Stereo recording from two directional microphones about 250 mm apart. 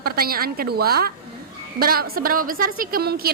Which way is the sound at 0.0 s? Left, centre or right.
Right.